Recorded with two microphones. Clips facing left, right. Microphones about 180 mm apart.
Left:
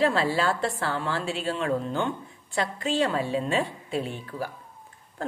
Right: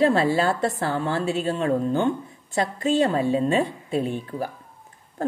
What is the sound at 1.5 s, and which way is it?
A woman's voice, 40° right (ahead or behind).